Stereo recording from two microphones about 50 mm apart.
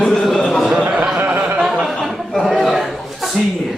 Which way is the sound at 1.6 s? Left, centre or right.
Centre.